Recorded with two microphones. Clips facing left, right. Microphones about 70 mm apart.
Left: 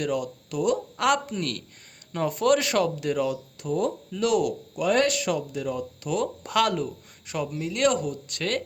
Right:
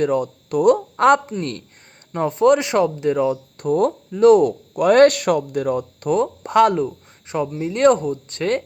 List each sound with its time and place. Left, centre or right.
0.0 s speech: right
3.6 s speech: right
4.7 s speech: right
6.1 s speech: right